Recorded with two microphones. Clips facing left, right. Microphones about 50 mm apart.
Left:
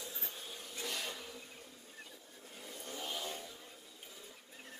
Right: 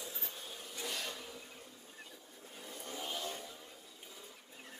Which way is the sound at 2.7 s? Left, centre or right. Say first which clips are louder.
Right 1 dB; right.